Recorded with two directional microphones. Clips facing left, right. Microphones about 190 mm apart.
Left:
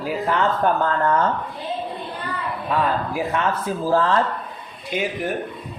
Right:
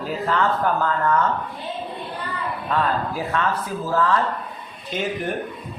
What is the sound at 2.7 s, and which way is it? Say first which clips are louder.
Speech: left 1 dB; 15° left (ahead or behind).